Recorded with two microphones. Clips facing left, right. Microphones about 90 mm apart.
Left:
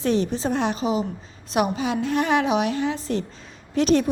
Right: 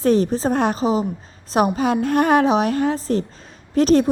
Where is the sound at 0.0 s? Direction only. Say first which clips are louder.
Right 5 dB; 40° right (ahead or behind).